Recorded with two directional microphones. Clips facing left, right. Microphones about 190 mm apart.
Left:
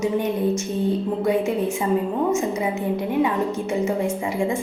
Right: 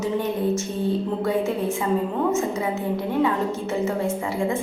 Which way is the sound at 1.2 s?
15° left (ahead or behind).